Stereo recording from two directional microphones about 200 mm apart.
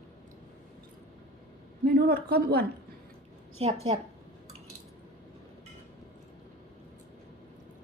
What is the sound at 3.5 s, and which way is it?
Speech, 30° right (ahead or behind).